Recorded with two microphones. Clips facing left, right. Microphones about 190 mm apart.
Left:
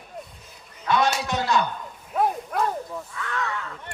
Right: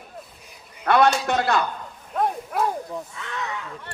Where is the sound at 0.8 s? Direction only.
60° right (ahead or behind).